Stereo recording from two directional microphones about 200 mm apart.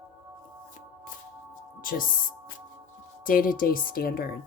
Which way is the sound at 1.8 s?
45° left (ahead or behind).